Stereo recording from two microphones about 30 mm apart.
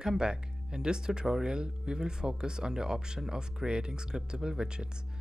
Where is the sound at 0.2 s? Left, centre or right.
Right.